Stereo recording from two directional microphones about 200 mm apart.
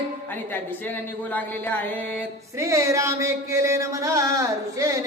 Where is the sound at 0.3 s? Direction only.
10° left (ahead or behind).